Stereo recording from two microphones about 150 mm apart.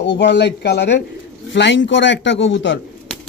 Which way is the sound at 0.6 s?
90° left.